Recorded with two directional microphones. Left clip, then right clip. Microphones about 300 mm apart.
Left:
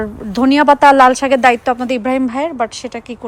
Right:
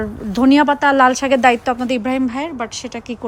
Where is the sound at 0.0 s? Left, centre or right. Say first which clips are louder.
Left 1 dB; centre.